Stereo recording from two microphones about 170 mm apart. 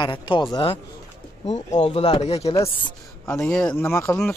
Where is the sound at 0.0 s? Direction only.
30° left (ahead or behind).